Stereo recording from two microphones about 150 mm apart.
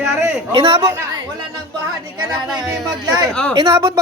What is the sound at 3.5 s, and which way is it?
Speech, 30° right (ahead or behind).